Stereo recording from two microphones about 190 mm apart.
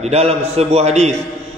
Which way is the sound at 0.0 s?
30° right (ahead or behind).